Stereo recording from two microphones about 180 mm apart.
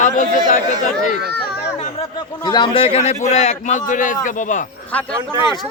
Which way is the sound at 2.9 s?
40° left (ahead or behind).